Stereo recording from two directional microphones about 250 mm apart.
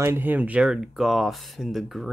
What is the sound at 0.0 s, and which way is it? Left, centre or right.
Speech, centre.